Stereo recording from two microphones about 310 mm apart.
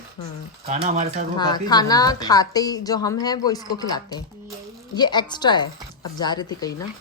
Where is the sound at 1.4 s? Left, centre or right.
Centre.